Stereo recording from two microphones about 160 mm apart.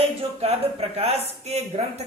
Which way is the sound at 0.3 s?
40° right (ahead or behind).